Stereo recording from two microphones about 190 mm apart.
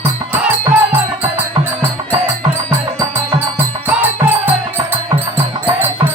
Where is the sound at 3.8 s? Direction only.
10° right (ahead or behind).